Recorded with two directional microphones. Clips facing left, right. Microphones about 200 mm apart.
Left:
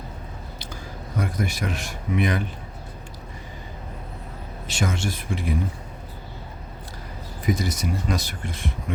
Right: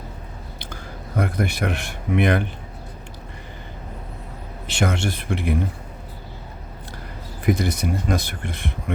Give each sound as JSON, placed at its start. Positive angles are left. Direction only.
{"t": 0.6, "sound": "speech", "side_deg": -60}
{"t": 4.6, "sound": "speech", "side_deg": -65}
{"t": 7.4, "sound": "speech", "side_deg": -60}